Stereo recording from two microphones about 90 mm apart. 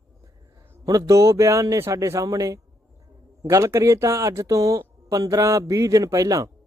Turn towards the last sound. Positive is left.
turn(degrees=-40)  # may be behind; listen again after turning